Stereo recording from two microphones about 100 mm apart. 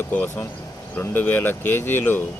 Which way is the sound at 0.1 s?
15° left (ahead or behind).